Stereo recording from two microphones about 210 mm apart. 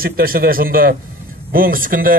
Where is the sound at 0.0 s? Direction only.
45° right (ahead or behind).